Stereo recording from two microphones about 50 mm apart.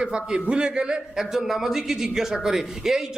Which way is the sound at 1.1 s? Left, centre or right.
Centre.